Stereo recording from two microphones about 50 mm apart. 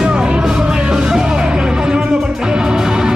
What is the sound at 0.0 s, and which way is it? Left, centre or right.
Music, centre.